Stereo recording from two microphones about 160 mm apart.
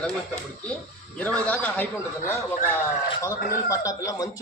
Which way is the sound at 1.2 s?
10° left (ahead or behind).